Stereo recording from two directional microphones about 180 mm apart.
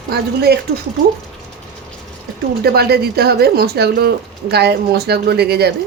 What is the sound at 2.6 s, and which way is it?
Speech, 60° right (ahead or behind).